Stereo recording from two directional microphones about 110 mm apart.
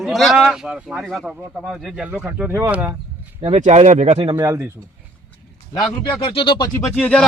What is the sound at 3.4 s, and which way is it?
Speech, 80° right.